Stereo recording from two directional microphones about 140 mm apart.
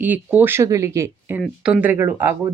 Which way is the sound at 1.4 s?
Centre (ahead or behind).